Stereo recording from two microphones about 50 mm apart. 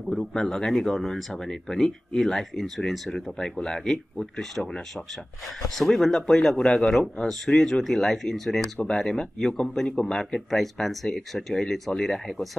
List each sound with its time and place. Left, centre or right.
0.0 s a man's voice: centre
10.1 s speech: centre